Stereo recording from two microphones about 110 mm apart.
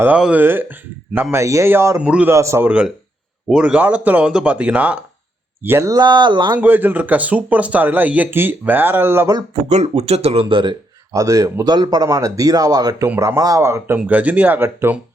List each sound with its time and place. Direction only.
0.0 s speech: 10° right (ahead or behind)
2.0 s speech: 10° right (ahead or behind)
2.3 s speech: 25° right (ahead or behind)
2.6 s speech: 10° right (ahead or behind)
5.9 s a man's voice: 40° right (ahead or behind)
6.6 s speech: 15° right (ahead or behind)
9.6 s speech: 85° right; by 10.8 s 50° right (ahead or behind)
11.1 s a man's voice: 30° right (ahead or behind)
13.9 s speech: 15° right (ahead or behind)